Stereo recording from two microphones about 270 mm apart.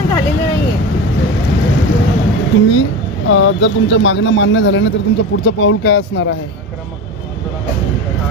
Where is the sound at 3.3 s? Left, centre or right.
Left.